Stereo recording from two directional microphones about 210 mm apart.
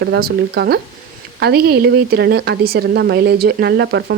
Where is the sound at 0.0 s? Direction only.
50° right (ahead or behind).